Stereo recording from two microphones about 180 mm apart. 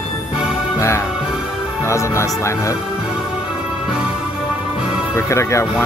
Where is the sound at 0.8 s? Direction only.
15° left (ahead or behind).